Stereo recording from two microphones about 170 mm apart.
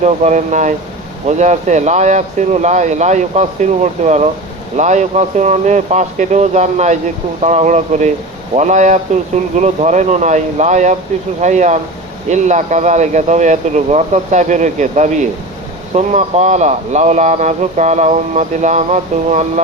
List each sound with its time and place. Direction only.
0.0 s speech: 45° right (ahead or behind)